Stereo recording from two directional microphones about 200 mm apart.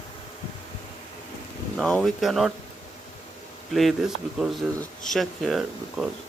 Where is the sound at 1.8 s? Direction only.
Centre (ahead or behind).